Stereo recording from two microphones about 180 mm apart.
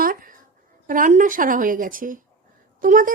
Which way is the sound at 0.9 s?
45° right (ahead or behind).